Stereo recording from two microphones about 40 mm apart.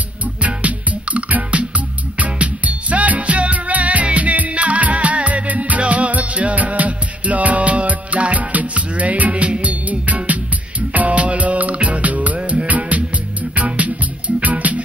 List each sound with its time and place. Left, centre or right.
0.4 s music: right